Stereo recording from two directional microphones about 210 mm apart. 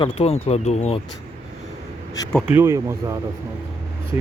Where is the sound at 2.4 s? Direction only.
10° right (ahead or behind).